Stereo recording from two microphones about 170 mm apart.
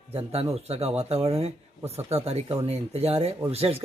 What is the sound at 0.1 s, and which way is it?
A man's voice, 35° right (ahead or behind).